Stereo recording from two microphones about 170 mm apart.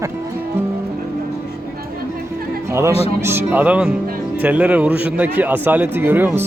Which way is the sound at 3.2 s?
15° right (ahead or behind).